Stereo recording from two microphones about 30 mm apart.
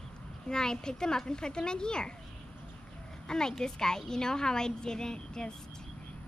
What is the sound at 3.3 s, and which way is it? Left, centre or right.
A woman's voice, left.